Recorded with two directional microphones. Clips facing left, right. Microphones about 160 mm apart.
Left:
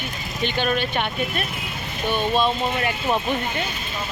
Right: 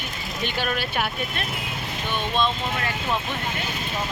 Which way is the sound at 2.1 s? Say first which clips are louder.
Left 4 dB; 10° left (ahead or behind).